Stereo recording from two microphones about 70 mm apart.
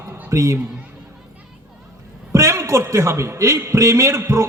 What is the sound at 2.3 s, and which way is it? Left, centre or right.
A man's voice, right.